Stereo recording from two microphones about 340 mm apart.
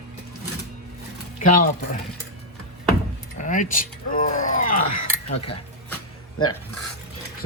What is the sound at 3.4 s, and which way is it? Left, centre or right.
Speech, left.